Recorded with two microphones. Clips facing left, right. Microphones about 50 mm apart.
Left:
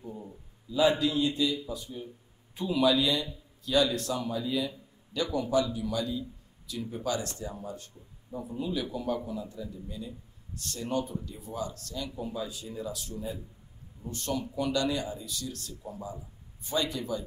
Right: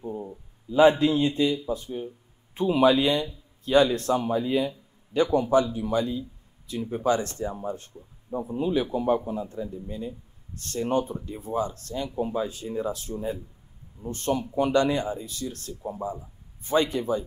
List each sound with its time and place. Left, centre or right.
0.0 s a man's voice: right